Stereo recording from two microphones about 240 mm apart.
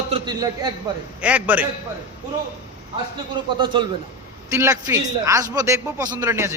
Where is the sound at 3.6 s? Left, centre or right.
Centre.